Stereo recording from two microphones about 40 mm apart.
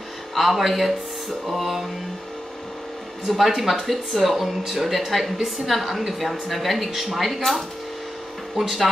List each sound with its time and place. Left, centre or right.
0.3 s speech: centre
3.3 s speech: centre